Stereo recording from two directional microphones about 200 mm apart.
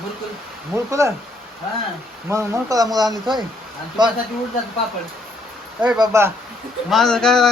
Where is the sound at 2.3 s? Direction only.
15° right (ahead or behind).